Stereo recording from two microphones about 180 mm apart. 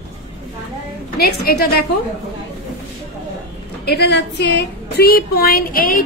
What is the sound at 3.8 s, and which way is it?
A woman's voice, 65° left (ahead or behind).